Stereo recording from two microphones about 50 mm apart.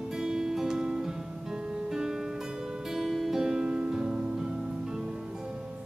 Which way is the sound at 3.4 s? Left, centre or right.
Centre.